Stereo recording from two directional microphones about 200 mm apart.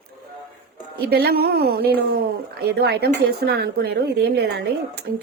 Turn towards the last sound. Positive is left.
turn(degrees=-55)  # may be behind; listen again after turning